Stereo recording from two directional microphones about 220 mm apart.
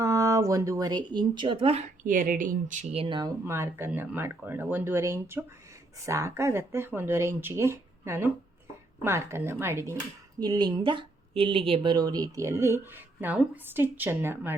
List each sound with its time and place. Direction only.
0.0 s speech: 15° right (ahead or behind)